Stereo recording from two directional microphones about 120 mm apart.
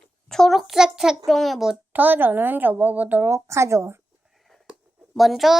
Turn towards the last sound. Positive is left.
turn(degrees=0)  # may be behind; listen again after turning